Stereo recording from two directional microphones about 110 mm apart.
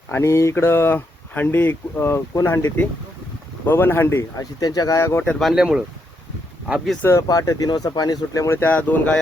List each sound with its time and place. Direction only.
0.1 s speech: 25° left (ahead or behind)
4.4 s speech: 35° left (ahead or behind)
5.4 s speech: centre (ahead or behind)
7.0 s speech: 25° left (ahead or behind)